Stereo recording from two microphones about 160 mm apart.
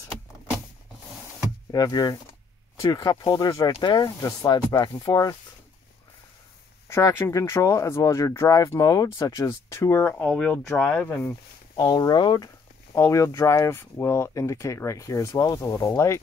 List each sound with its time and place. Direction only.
1.7 s speech: 25° left (ahead or behind)
6.9 s speech: 15° left (ahead or behind)
11.7 s speech: 25° left (ahead or behind)